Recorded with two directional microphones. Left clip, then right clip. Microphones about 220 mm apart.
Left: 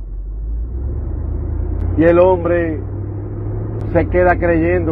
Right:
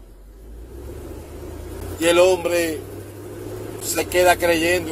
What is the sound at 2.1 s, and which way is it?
Speech, 45° right (ahead or behind).